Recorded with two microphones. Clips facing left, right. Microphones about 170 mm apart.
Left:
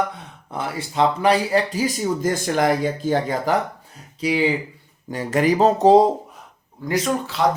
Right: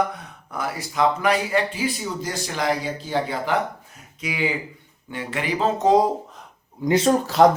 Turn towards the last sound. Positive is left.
turn(degrees=-45)  # may be behind; listen again after turning